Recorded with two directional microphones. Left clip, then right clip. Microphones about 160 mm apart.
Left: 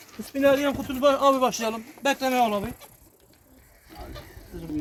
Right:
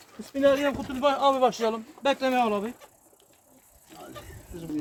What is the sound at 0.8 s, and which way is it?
Speech, 70° left (ahead or behind).